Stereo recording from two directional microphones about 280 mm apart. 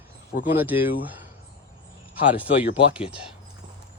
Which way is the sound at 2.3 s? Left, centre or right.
Centre.